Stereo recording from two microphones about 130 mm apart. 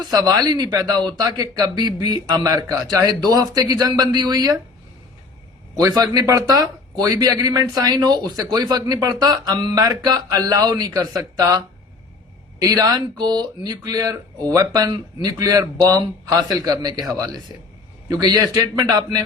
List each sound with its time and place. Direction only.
0.0 s speech: 30° right (ahead or behind)
5.7 s a man's voice: 30° right (ahead or behind)